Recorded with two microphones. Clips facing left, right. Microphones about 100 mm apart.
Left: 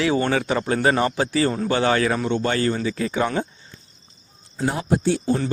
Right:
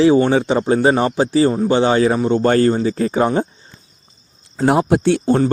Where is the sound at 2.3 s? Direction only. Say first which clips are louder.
Right 8 dB; 40° right (ahead or behind).